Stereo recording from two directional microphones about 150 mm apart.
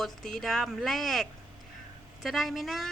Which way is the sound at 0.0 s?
Centre (ahead or behind).